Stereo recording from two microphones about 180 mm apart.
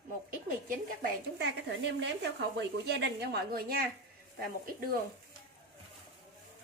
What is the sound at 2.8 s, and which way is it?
Speech, 70° right (ahead or behind).